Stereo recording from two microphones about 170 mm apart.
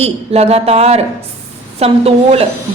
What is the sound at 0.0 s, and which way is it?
Speech, 40° right (ahead or behind).